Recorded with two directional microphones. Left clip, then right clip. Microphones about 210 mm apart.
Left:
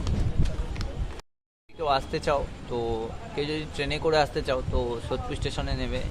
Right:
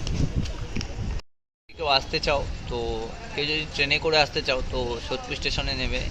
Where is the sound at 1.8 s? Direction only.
15° left (ahead or behind).